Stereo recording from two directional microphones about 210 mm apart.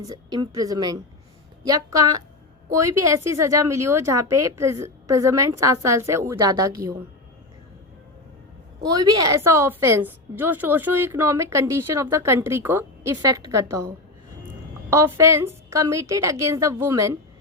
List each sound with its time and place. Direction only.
0.0 s a woman's voice: 20° right (ahead or behind)
8.8 s a woman's voice: 15° right (ahead or behind)